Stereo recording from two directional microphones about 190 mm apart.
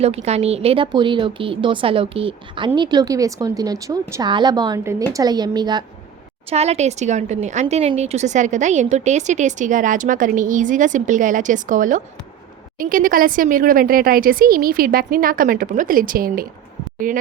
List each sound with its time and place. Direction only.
0.0 s a woman's voice: 35° right (ahead or behind)
6.5 s a woman's voice: 35° right (ahead or behind)